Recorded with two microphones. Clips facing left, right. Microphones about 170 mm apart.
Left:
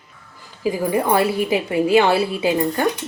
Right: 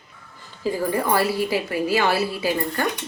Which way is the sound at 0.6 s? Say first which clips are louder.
Left 3 dB; 15° left (ahead or behind).